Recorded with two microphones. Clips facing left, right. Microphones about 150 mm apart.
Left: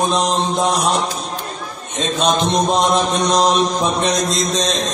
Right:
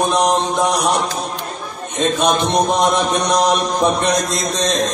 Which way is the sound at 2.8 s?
60° right (ahead or behind).